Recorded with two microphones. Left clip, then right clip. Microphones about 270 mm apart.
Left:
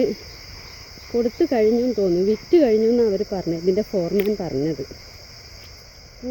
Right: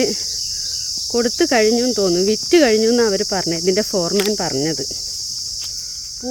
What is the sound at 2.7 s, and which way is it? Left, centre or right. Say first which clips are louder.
Cricket: right 2 dB; right.